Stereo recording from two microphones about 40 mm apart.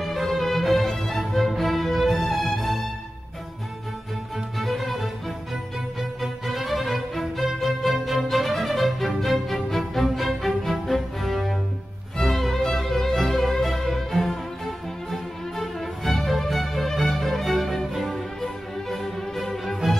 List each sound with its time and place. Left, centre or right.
0.0 s music: centre
4.6 s music: centre